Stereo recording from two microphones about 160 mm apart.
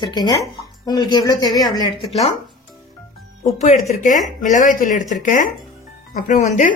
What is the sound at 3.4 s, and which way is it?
Speech, 45° left (ahead or behind).